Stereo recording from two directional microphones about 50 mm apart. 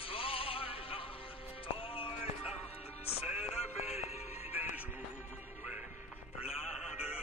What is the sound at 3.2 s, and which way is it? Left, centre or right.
Music, right.